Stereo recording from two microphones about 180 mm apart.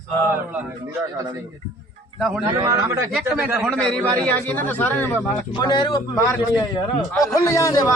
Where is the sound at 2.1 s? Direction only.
Centre (ahead or behind).